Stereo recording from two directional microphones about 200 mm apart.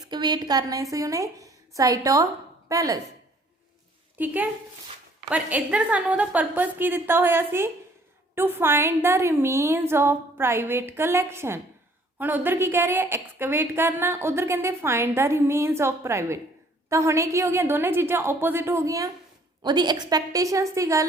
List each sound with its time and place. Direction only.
0.1 s a woman's voice: 20° right (ahead or behind)
4.2 s a woman's voice: 10° right (ahead or behind)